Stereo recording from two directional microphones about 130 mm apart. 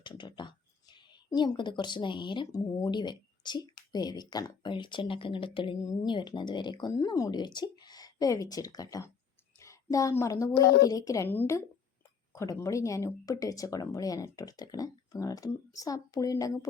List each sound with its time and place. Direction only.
0.0 s speech: 35° left (ahead or behind)